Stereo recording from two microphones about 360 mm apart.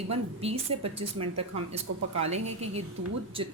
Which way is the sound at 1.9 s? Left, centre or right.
Right.